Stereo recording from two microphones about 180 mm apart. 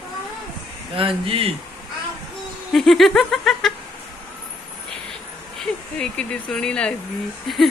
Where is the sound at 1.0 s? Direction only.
30° right (ahead or behind).